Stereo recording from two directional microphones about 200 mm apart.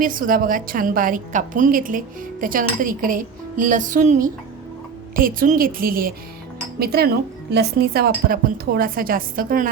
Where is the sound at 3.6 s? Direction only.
40° right (ahead or behind).